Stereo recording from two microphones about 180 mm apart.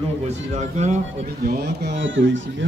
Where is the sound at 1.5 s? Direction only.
65° right (ahead or behind); by 2.6 s 90° right.